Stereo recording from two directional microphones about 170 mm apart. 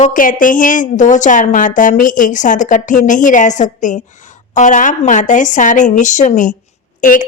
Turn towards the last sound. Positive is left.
turn(degrees=50)  # may be behind; listen again after turning